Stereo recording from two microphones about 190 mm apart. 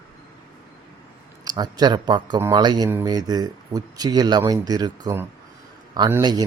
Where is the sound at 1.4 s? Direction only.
20° right (ahead or behind).